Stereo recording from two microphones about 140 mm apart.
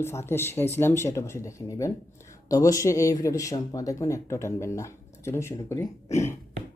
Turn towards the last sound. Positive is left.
turn(degrees=20)  # may be behind; listen again after turning